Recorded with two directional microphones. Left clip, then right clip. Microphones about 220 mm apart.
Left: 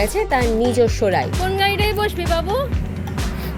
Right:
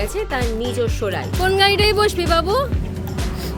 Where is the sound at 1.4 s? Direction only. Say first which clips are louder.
Right 3 dB; 15° right (ahead or behind).